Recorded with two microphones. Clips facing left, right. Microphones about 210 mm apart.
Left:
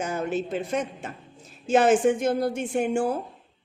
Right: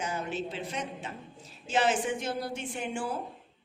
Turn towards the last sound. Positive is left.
turn(degrees=45)  # may be behind; listen again after turning